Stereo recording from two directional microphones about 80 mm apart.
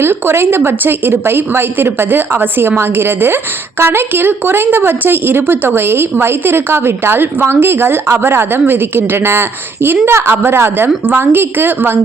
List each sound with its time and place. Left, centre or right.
0.0 s a woman's voice: right